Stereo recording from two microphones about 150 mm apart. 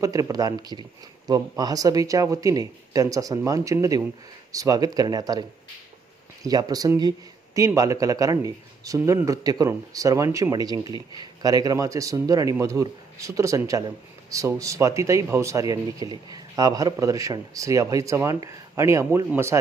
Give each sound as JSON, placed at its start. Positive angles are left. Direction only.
{"t": 0.0, "sound": "speech", "side_deg": -25}